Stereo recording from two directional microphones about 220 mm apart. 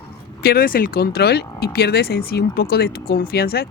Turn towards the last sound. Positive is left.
turn(degrees=45)  # may be behind; listen again after turning